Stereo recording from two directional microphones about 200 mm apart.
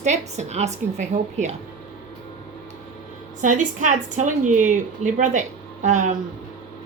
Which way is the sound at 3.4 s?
40° right (ahead or behind).